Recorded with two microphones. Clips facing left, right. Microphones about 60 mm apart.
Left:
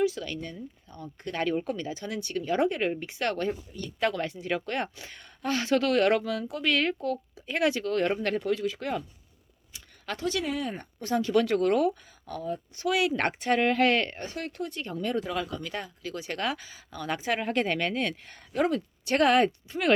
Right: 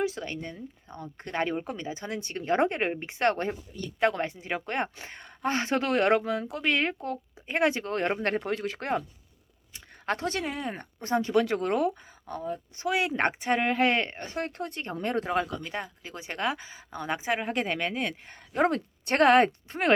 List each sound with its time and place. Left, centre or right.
0.0 s speech: right
10.4 s speech: right
15.5 s speech: right
18.5 s speech: right